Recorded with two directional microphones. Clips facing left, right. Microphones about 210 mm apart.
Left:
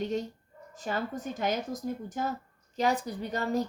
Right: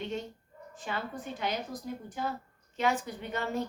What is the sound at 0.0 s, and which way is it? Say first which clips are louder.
A woman's voice: left 5 dB; 40° left (ahead or behind).